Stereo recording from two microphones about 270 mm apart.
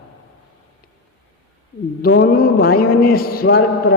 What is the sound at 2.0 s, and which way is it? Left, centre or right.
A man's voice, left.